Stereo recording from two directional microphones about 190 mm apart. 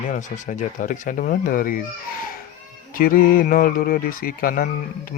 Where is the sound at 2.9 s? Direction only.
50° left (ahead or behind).